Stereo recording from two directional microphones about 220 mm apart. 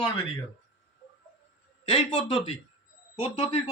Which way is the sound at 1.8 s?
30° left (ahead or behind).